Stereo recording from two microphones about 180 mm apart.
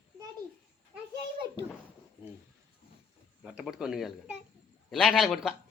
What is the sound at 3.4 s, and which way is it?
A child's voice, 5° right (ahead or behind).